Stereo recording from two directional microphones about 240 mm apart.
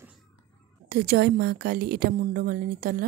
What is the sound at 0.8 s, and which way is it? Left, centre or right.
A woman's voice, right.